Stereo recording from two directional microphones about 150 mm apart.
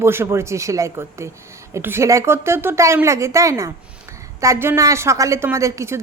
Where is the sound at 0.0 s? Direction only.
15° right (ahead or behind).